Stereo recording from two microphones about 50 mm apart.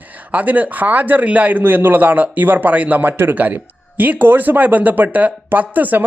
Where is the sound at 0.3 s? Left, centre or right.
Right.